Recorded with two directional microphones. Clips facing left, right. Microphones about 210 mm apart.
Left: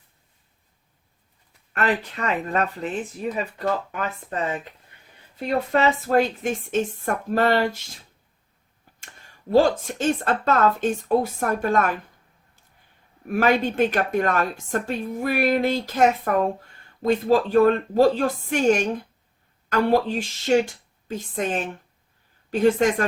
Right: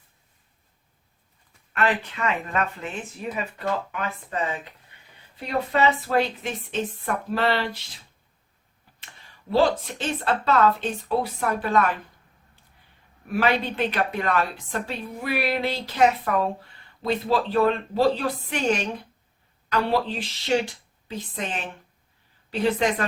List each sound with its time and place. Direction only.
1.7 s a woman's voice: 40° left (ahead or behind)
9.5 s a woman's voice: 45° left (ahead or behind)
13.2 s a woman's voice: 45° left (ahead or behind)